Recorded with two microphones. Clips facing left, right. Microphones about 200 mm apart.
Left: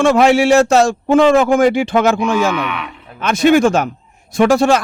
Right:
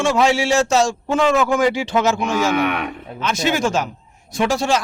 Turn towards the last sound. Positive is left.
turn(degrees=55)  # may be behind; listen again after turning